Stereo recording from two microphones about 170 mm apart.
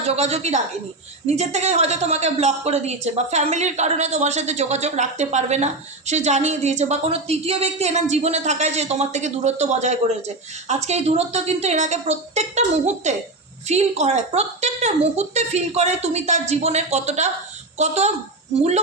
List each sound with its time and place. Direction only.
0.0 s a woman's voice: 35° right (ahead or behind)